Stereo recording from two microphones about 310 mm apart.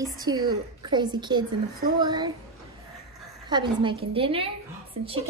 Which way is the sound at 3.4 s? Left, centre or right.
Centre.